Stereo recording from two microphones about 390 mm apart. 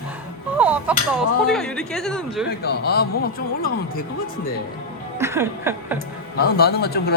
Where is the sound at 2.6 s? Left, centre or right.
Left.